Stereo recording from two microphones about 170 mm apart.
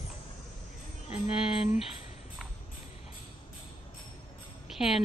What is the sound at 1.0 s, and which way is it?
Music, 35° left (ahead or behind).